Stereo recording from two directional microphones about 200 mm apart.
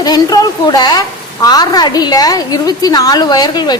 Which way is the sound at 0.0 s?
20° left (ahead or behind).